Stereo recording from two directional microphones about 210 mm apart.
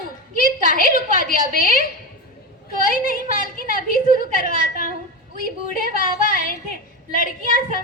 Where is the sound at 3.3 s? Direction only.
45° left (ahead or behind).